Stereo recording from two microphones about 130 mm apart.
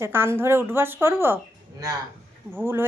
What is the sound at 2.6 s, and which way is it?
Speech, 15° right (ahead or behind).